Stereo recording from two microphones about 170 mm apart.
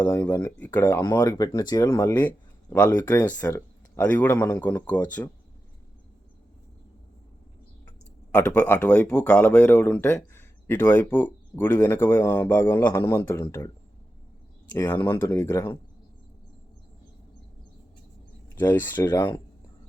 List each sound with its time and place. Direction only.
0.1 s speech: 20° left (ahead or behind)
7.9 s speech: 10° left (ahead or behind)
14.7 s speech: 20° left (ahead or behind)
15.3 s speech: 15° left (ahead or behind)
18.5 s speech: 10° left (ahead or behind)